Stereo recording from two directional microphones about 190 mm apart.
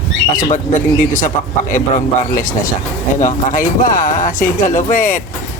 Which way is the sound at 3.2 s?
45° left (ahead or behind).